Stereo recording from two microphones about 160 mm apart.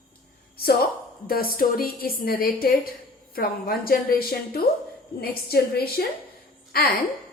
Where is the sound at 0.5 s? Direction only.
75° left (ahead or behind).